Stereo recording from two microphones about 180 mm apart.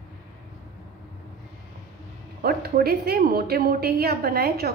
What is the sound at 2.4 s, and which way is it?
A woman's voice, 60° right (ahead or behind).